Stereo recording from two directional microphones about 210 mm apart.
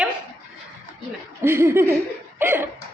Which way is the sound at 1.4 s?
10° right (ahead or behind).